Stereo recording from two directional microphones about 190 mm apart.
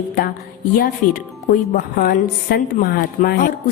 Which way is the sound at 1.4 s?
45° left (ahead or behind).